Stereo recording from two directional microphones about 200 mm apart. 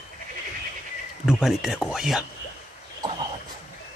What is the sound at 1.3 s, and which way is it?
Speech, centre (ahead or behind).